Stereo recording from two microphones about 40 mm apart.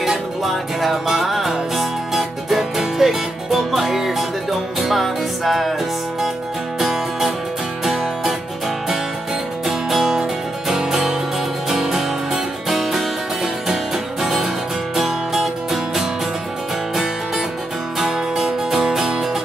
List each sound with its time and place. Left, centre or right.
0.0 s music: centre
6.8 s music: centre
9.7 s music: centre
14.2 s music: centre
17.9 s music: centre